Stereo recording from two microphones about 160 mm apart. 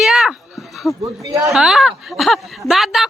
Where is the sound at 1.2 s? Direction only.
20° right (ahead or behind).